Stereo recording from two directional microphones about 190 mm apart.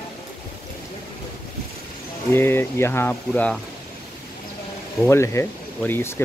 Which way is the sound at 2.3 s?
10° left (ahead or behind).